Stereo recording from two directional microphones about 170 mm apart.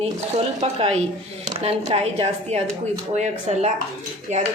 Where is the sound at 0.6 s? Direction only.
40° right (ahead or behind).